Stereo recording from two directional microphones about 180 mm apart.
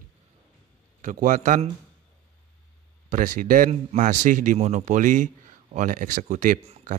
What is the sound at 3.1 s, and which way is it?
A man's voice, 45° right (ahead or behind).